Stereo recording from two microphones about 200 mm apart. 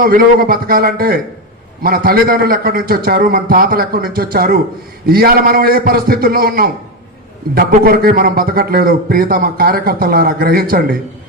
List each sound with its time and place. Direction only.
0.0 s a man's voice: 45° right (ahead or behind)